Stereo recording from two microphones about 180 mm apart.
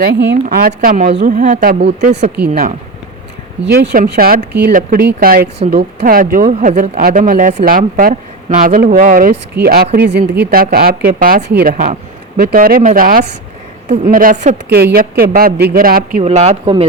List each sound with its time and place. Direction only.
0.0 s speech: 65° right (ahead or behind)
0.4 s speech: 50° right (ahead or behind)
13.8 s speech: 40° right (ahead or behind)
16.2 s speech: 35° right (ahead or behind)